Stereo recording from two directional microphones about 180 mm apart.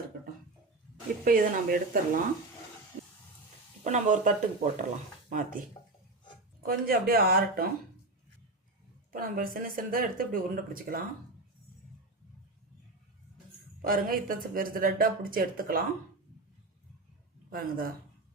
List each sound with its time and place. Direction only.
0.1 s a sound: 60° right (ahead or behind)
1.2 s speech: 50° right (ahead or behind)
3.8 s speech: 45° right (ahead or behind)
9.1 s speech: 50° right (ahead or behind)
13.8 s speech: 50° right (ahead or behind)
17.5 s speech: 55° right (ahead or behind)